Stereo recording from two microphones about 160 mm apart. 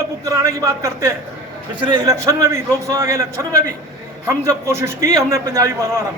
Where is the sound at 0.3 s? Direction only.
20° right (ahead or behind).